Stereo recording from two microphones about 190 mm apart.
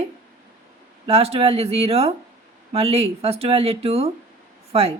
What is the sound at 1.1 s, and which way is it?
A woman's voice, 30° right (ahead or behind).